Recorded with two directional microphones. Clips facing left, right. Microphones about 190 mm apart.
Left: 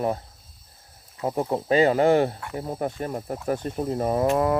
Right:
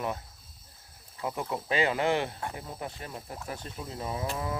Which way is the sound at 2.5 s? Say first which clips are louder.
Left 11 dB; 45° left (ahead or behind).